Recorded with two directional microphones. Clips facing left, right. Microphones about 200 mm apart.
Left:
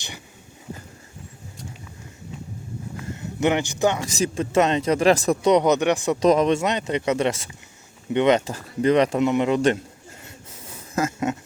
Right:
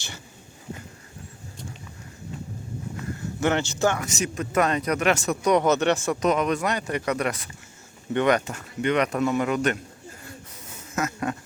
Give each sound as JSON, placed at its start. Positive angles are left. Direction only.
{"t": 3.1, "sound": "speech", "side_deg": 15}
{"t": 4.0, "sound": "speech", "side_deg": 30}
{"t": 6.1, "sound": "speech", "side_deg": 30}
{"t": 10.9, "sound": "a sound", "side_deg": 25}